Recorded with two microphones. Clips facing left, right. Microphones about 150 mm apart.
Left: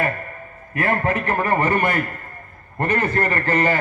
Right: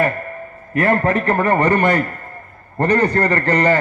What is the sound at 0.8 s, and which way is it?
A man's voice, 40° right (ahead or behind).